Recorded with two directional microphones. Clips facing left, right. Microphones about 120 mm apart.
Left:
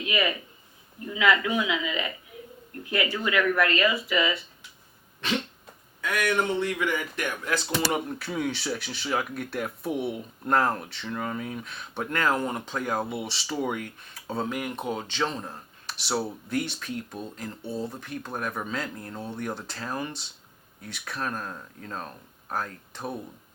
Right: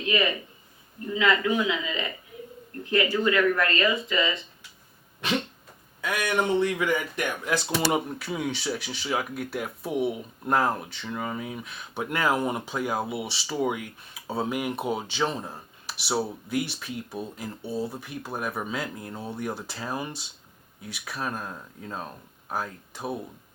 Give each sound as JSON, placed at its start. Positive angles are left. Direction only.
{"t": 1.1, "sound": "speech", "side_deg": 15}
{"t": 3.3, "sound": "speech", "side_deg": 15}
{"t": 6.1, "sound": "speech", "side_deg": -15}
{"t": 8.2, "sound": "speech", "side_deg": 0}
{"t": 12.0, "sound": "speech", "side_deg": -10}
{"t": 14.4, "sound": "speech", "side_deg": -15}